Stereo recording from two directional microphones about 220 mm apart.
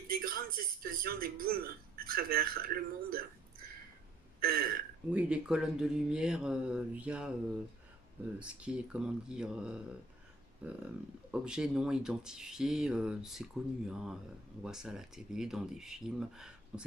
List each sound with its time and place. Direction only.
0.1 s music: 40° right (ahead or behind)
0.8 s speech: 45° right (ahead or behind)
4.4 s a sound: 45° right (ahead or behind)
5.1 s speech: 5° right (ahead or behind)
8.4 s speech: 5° right (ahead or behind)